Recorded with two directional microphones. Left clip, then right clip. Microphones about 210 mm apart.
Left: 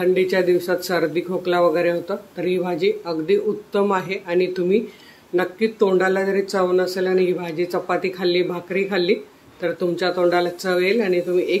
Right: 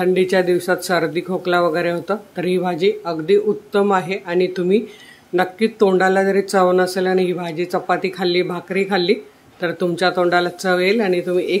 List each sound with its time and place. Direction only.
0.0 s speech: 20° right (ahead or behind)